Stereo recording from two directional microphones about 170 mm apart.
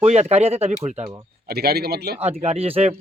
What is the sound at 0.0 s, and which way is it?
Speech, 40° right (ahead or behind).